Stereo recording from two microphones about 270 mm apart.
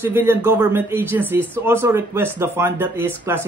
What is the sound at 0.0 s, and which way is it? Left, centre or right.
Speech, centre.